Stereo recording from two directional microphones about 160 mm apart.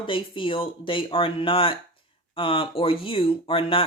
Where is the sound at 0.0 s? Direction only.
35° left (ahead or behind).